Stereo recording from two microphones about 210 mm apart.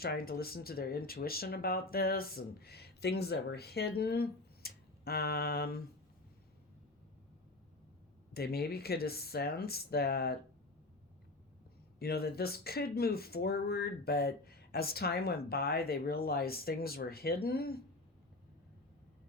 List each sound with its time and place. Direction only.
0.0 s speech: 45° left (ahead or behind)
8.3 s speech: 50° left (ahead or behind)
11.9 s speech: 50° left (ahead or behind)